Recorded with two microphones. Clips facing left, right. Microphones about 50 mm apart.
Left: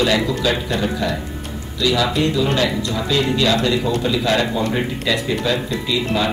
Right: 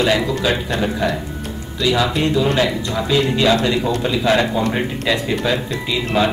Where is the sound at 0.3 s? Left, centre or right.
Centre.